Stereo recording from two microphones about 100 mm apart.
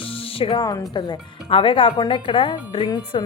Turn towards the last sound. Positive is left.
turn(degrees=60)  # may be behind; listen again after turning